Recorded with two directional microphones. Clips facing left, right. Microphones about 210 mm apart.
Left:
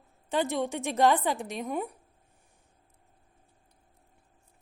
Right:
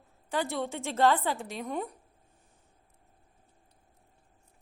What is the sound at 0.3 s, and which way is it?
A woman's voice, 20° left (ahead or behind).